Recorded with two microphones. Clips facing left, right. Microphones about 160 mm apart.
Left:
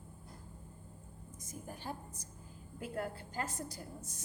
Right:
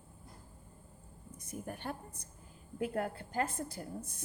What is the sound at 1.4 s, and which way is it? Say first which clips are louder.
A woman's voice: right 3 dB; 65° right (ahead or behind).